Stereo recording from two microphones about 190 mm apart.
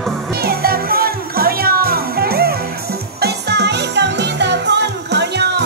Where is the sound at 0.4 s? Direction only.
55° right (ahead or behind).